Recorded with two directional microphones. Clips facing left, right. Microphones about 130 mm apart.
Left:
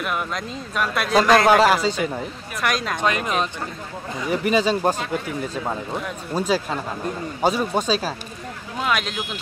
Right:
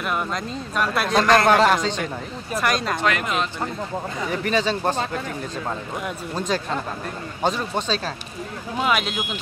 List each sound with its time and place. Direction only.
0.0 s speech: centre (ahead or behind)
3.0 s speech: 20° left (ahead or behind)
4.3 s a man's voice: 10° left (ahead or behind)
6.3 s a man's voice: 10° left (ahead or behind)
8.7 s speech: 5° right (ahead or behind)